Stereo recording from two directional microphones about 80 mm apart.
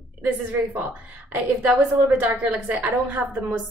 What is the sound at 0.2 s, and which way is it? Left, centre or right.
A woman's voice, right.